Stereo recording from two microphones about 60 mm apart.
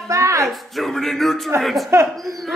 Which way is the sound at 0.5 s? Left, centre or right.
Centre.